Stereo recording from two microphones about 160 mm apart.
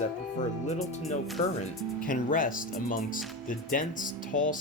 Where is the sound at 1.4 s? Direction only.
45° left (ahead or behind).